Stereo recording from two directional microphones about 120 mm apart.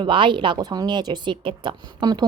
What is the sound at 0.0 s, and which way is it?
A woman's voice, 45° right (ahead or behind).